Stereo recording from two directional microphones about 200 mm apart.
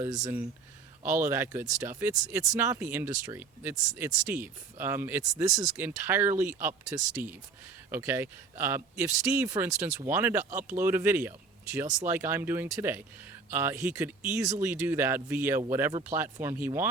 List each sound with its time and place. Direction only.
0.0 s speech: 15° right (ahead or behind)
10.5 s speech: 40° right (ahead or behind)
10.8 s speech: 10° right (ahead or behind)